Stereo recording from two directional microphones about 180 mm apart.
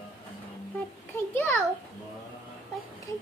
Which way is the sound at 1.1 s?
10° left (ahead or behind).